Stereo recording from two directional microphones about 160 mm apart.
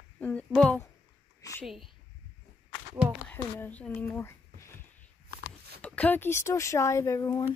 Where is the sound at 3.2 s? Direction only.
10° left (ahead or behind).